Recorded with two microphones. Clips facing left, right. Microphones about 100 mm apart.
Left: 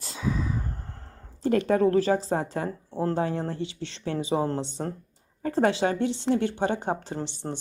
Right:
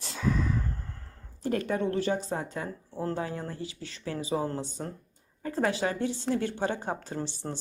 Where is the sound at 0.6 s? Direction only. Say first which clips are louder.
Even; 25° left (ahead or behind).